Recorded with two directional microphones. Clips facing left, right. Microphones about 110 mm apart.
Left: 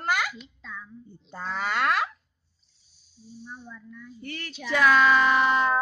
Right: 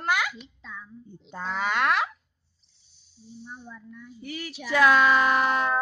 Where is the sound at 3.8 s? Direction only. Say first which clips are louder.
Even; 25° right (ahead or behind).